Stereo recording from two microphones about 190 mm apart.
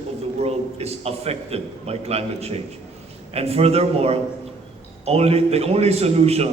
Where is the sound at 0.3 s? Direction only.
35° right (ahead or behind).